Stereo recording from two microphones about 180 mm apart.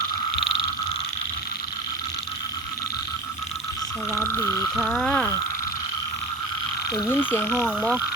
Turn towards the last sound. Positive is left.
turn(degrees=0)  # may be behind; listen again after turning